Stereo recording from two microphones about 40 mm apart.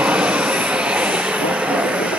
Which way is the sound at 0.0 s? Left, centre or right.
Right.